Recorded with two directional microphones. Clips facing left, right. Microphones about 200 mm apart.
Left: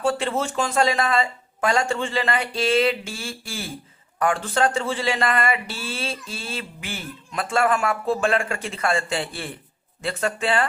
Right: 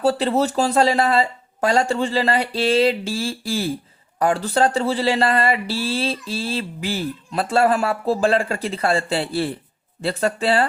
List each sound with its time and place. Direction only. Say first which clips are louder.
0.0 s speech: right 5 dB; 35° right (ahead or behind)